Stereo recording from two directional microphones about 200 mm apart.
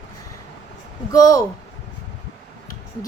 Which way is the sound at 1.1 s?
20° left (ahead or behind).